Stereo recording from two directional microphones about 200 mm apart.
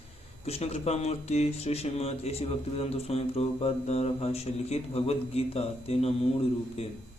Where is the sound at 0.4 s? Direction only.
30° left (ahead or behind).